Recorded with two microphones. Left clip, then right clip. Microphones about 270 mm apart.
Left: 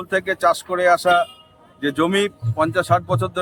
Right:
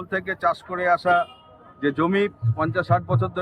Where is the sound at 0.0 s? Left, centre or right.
Centre.